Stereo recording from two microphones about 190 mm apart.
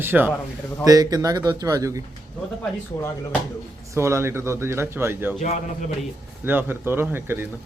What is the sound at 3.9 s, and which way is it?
Speech, 15° right (ahead or behind).